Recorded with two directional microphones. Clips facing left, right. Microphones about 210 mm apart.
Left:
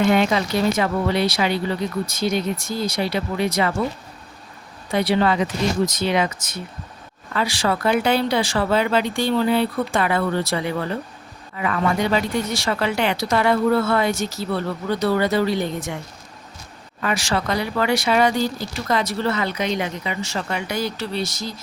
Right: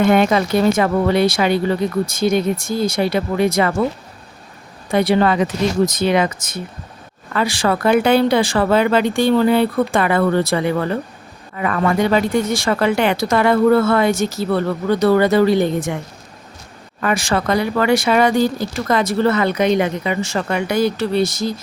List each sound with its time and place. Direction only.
0.0 s speech: 50° right (ahead or behind)
4.9 s speech: 50° right (ahead or behind)
17.0 s speech: 50° right (ahead or behind)